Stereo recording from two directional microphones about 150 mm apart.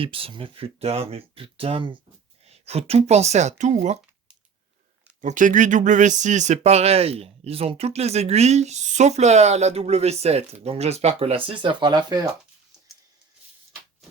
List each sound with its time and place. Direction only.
0.0 s speech: 35° right (ahead or behind)
5.2 s speech: 60° right (ahead or behind); by 12.3 s 25° right (ahead or behind)